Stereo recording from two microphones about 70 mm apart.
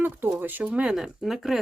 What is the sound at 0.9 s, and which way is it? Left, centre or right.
Speech, centre.